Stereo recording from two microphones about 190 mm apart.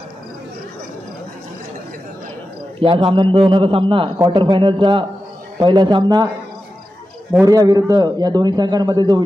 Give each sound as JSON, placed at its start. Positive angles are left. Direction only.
{"t": 2.8, "sound": "a man's voice", "side_deg": -25}
{"t": 7.4, "sound": "a man's voice", "side_deg": -20}